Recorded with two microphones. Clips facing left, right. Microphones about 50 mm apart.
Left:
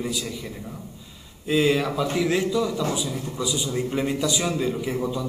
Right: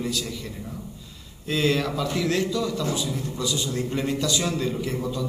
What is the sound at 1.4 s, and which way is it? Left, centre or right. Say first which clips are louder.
A man's voice: left 3 dB; centre.